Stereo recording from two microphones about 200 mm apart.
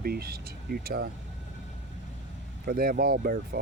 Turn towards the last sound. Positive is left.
turn(degrees=-50)  # may be behind; listen again after turning